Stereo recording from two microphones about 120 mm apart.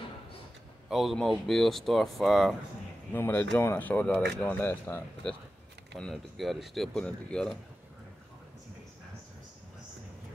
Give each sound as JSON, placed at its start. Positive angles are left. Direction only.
{"t": 0.8, "sound": "a man's voice", "side_deg": 0}
{"t": 3.1, "sound": "speech", "side_deg": 15}
{"t": 5.9, "sound": "speech", "side_deg": 5}